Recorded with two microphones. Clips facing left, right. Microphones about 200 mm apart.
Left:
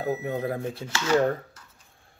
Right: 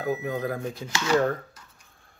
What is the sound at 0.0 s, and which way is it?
Speech, 25° left (ahead or behind).